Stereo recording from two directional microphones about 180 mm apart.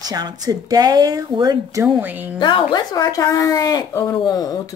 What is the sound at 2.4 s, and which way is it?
A woman's voice, 25° left (ahead or behind).